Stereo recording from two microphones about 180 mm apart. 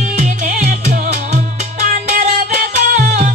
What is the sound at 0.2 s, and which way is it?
Music, 45° right (ahead or behind).